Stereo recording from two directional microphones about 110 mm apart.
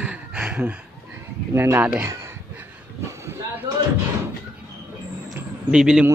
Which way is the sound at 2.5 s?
20° right (ahead or behind).